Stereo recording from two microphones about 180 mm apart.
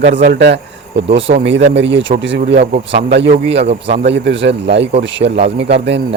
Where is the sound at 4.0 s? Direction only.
80° right.